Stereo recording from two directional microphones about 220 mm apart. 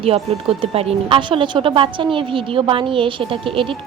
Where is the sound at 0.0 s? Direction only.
25° right (ahead or behind).